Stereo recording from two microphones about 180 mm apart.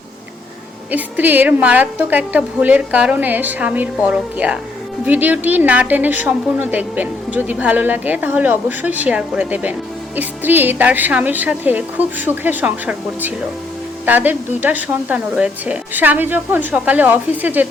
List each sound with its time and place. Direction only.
0.9 s a woman's voice: 10° right (ahead or behind)